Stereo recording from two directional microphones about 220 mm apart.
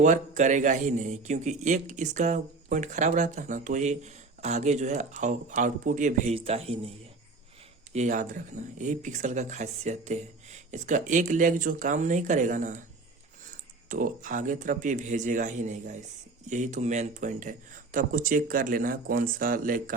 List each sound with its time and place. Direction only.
0.0 s a man's voice: 35° right (ahead or behind)
7.9 s a man's voice: 35° right (ahead or behind)
13.8 s a man's voice: 35° right (ahead or behind)